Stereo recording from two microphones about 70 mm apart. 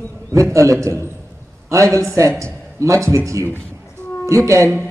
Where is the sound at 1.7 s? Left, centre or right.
Right.